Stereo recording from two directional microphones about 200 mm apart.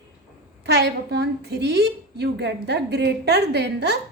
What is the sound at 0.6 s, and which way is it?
A woman's voice, 55° right (ahead or behind).